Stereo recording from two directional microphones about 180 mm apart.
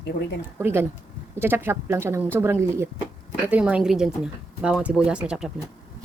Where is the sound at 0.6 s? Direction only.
10° right (ahead or behind).